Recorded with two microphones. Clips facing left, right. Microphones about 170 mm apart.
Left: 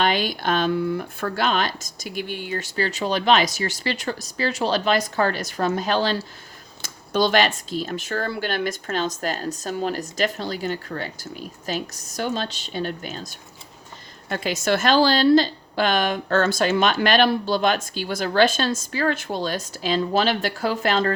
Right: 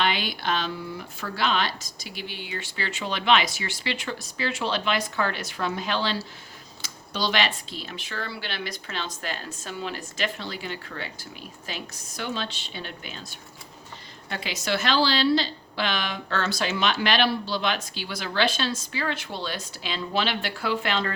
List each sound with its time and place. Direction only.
0.0 s a woman's voice: 45° left (ahead or behind)